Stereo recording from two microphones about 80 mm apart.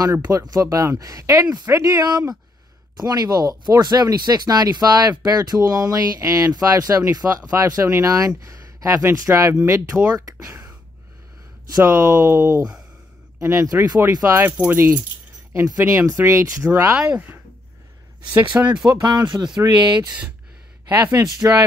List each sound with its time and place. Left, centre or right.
0.0 s speech: right
1.9 s speech: right
7.2 s speech: right
7.5 s speech: right
11.7 s speech: right
14.4 s speech: right
18.5 s speech: centre
18.9 s speech: right
20.9 s speech: right